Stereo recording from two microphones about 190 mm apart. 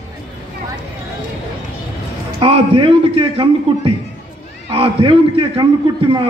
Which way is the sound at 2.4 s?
30° right (ahead or behind).